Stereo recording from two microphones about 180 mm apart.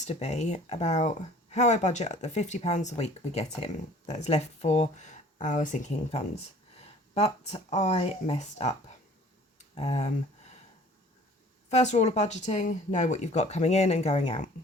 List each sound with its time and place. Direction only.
0.0 s speech: 40° left (ahead or behind)
9.6 s tick: 35° left (ahead or behind)
11.7 s speech: 40° left (ahead or behind)